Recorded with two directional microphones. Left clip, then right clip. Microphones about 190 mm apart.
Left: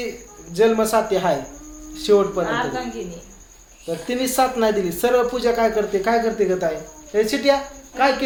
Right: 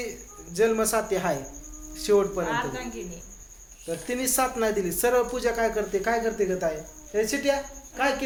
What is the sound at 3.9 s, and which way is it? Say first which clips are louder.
A man's voice: left 6 dB; 5° right (ahead or behind).